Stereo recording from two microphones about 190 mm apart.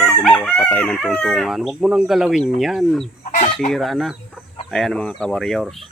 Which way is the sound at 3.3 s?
40° left (ahead or behind).